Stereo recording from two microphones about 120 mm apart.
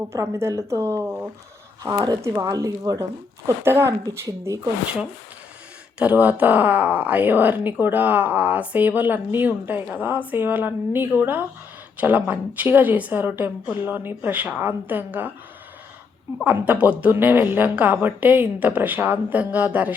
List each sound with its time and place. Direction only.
0.1 s speech: 25° right (ahead or behind)
6.0 s speech: 10° right (ahead or behind)
16.4 s speech: 10° right (ahead or behind)